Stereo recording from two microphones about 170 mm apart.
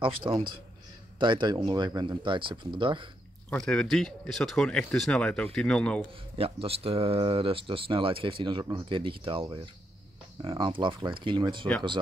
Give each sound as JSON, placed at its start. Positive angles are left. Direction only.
{"t": 0.0, "sound": "speech", "side_deg": -30}
{"t": 3.4, "sound": "speech", "side_deg": 5}
{"t": 6.3, "sound": "speech", "side_deg": -35}